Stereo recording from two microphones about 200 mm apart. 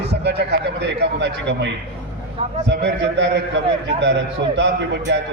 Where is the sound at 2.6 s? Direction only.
60° right (ahead or behind).